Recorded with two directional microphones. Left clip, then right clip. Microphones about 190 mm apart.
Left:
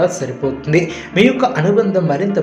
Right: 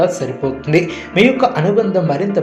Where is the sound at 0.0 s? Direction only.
5° right (ahead or behind).